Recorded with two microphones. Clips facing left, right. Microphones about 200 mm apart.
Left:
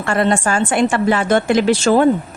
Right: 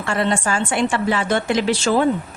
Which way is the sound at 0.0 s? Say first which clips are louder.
Left 4 dB; 50° left (ahead or behind).